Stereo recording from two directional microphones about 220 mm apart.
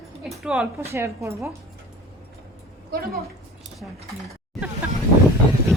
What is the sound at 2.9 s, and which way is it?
Speech, 45° right (ahead or behind).